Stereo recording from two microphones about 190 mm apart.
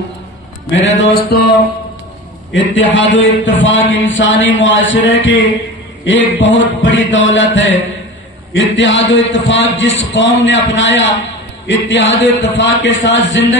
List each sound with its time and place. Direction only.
0.8 s music: 60° left (ahead or behind)
2.5 s a man's voice: 70° left (ahead or behind)